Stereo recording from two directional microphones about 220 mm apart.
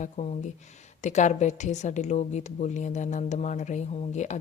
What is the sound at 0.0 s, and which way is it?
Speech, 30° left (ahead or behind).